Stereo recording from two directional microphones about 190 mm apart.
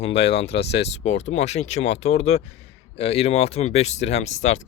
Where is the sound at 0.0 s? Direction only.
30° left (ahead or behind).